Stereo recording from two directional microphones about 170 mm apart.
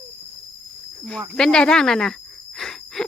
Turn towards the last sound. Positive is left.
turn(degrees=0)  # may be behind; listen again after turning